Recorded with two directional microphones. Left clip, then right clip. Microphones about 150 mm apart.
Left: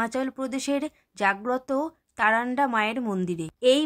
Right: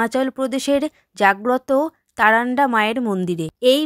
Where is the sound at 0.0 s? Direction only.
40° right (ahead or behind).